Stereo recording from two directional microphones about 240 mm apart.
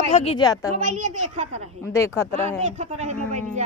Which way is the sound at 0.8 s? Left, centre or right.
Right.